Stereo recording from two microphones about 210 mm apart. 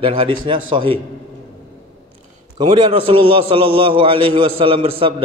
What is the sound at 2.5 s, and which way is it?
A man's voice, 20° right (ahead or behind).